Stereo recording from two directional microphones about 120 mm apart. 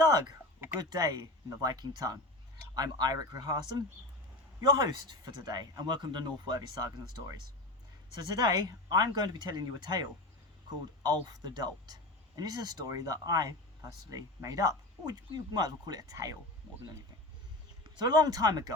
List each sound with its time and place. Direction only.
0.1 s speech: 35° right (ahead or behind)
8.4 s speech: 35° right (ahead or behind)
17.8 s speech: 35° right (ahead or behind)